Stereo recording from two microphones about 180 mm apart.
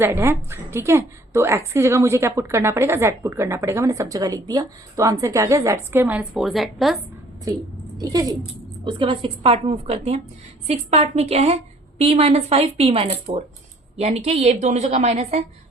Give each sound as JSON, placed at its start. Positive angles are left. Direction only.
{"t": 0.0, "sound": "a woman's voice", "side_deg": -15}
{"t": 7.4, "sound": "a woman's voice", "side_deg": -20}